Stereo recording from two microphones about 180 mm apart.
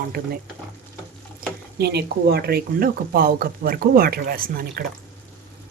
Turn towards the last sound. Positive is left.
turn(degrees=-55)  # may be behind; listen again after turning